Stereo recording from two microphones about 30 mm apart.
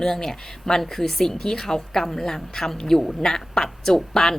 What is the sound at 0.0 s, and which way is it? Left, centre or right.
A woman's voice, centre.